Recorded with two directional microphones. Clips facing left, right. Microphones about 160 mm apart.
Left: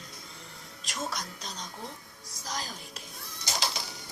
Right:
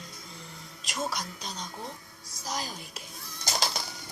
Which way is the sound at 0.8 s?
5° right (ahead or behind).